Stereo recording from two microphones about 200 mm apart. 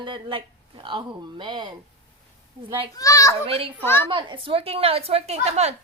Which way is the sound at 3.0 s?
15° left (ahead or behind).